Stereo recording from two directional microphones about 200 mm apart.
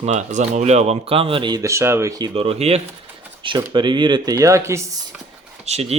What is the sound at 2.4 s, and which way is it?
Speech, 30° right (ahead or behind).